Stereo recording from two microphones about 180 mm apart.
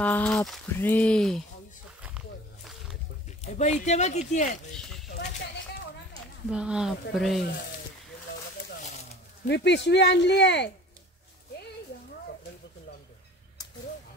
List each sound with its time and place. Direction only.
0.0 s speech: 5° left (ahead or behind)
2.0 s a sound: 5° right (ahead or behind)
3.4 s speech: 40° left (ahead or behind)
6.5 s speech: 5° right (ahead or behind)
8.9 s a sound: 40° left (ahead or behind)
9.5 s speech: 75° left (ahead or behind)